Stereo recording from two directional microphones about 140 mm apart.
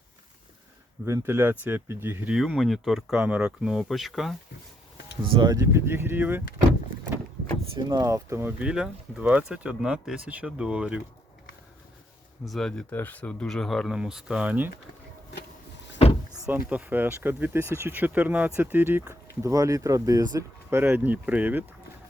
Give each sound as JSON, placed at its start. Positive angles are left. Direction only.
{"t": 1.0, "sound": "speech", "side_deg": -20}
{"t": 2.3, "sound": "speech", "side_deg": -5}
{"t": 5.2, "sound": "speech", "side_deg": -35}
{"t": 5.5, "sound": "speech", "side_deg": -20}
{"t": 7.8, "sound": "speech", "side_deg": -25}
{"t": 12.5, "sound": "speech", "side_deg": 5}
{"t": 16.5, "sound": "speech", "side_deg": -10}
{"t": 20.7, "sound": "speech", "side_deg": -15}